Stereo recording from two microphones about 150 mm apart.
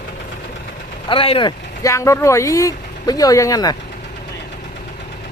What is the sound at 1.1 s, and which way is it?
Speech, 35° left (ahead or behind).